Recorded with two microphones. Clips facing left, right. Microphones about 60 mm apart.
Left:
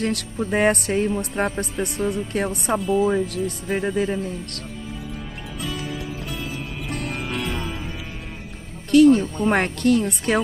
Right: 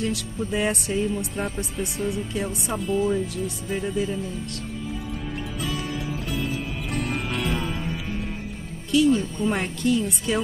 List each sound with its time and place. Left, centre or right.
0.0 s speech: left
1.9 s speech: centre
3.1 s speech: left
5.6 s music: centre
8.9 s speech: left